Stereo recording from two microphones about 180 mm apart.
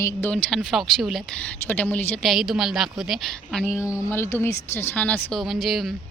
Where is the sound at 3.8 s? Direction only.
15° left (ahead or behind).